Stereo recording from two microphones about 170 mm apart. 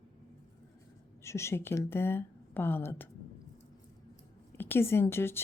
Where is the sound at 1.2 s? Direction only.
15° left (ahead or behind).